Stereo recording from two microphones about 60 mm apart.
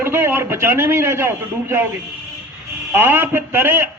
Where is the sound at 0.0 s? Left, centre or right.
Right.